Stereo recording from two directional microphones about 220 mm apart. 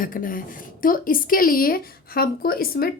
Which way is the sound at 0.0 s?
40° left (ahead or behind).